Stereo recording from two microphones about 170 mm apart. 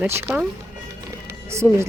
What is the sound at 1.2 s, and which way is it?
Music, 15° right (ahead or behind).